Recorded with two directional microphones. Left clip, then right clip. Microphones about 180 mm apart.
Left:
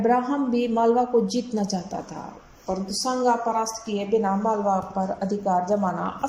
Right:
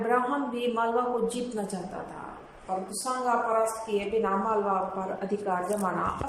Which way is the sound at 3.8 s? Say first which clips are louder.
Left 4 dB; 45° left (ahead or behind).